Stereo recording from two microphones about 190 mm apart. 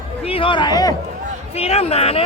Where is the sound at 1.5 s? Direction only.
30° left (ahead or behind).